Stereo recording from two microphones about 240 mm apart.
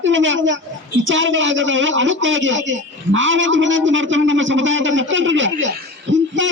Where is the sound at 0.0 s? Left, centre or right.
Right.